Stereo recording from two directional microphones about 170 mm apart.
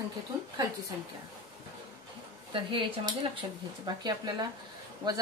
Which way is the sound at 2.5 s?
30° right (ahead or behind).